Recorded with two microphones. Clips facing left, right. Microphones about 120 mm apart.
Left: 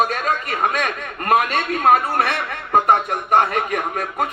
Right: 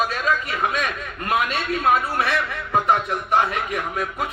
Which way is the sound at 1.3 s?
50° left (ahead or behind).